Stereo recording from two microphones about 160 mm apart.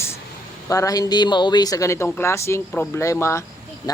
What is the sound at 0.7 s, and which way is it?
Speech, 20° left (ahead or behind).